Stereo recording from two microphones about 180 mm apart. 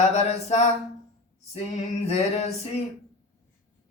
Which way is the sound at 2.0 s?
40° left (ahead or behind).